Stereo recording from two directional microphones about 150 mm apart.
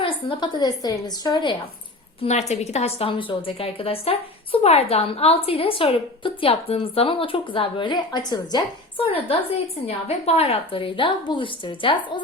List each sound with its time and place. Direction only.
0.0 s a woman's voice: 30° left (ahead or behind)
2.2 s a woman's voice: 45° left (ahead or behind); by 9.0 s 25° left (ahead or behind)
9.8 s a woman's voice: 45° left (ahead or behind)